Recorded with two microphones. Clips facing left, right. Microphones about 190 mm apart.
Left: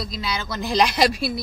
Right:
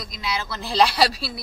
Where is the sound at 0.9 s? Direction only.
35° right (ahead or behind).